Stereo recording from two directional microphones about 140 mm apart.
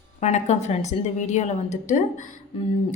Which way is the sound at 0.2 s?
55° left (ahead or behind).